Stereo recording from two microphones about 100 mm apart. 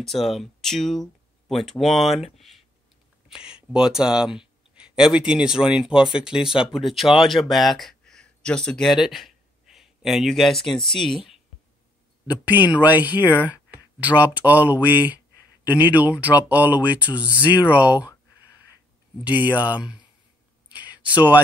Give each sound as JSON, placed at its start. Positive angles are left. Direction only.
{"t": 0.0, "sound": "speech", "side_deg": 0}
{"t": 12.3, "sound": "speech", "side_deg": -15}
{"t": 19.2, "sound": "speech", "side_deg": -15}
{"t": 20.6, "sound": "a sound", "side_deg": -15}